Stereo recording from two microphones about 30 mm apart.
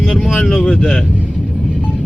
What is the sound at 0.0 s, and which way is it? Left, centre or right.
Speech, centre.